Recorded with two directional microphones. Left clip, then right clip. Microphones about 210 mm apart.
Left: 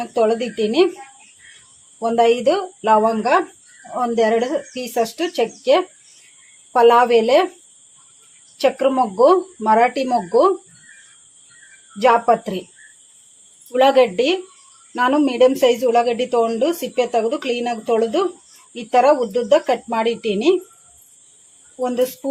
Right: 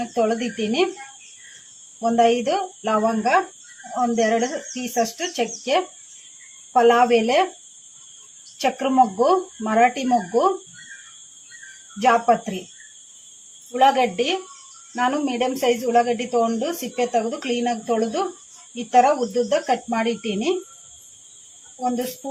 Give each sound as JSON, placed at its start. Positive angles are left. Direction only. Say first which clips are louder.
{"t": 0.0, "sound": "speech", "louder": "left 4 dB", "side_deg": 40}
{"t": 2.0, "sound": "speech", "louder": "left 2 dB", "side_deg": 40}
{"t": 8.5, "sound": "speech", "louder": "left 2 dB", "side_deg": 40}
{"t": 11.9, "sound": "speech", "louder": "left 3 dB", "side_deg": 40}
{"t": 13.7, "sound": "speech", "louder": "left 4 dB", "side_deg": 45}